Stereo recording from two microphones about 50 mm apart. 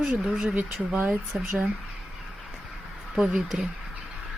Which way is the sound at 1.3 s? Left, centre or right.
Right.